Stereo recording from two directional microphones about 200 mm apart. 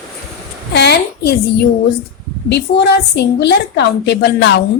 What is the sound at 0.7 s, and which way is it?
Speech, 55° left (ahead or behind).